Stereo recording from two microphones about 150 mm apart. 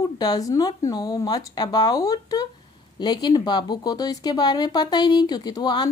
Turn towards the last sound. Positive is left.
turn(degrees=30)  # may be behind; listen again after turning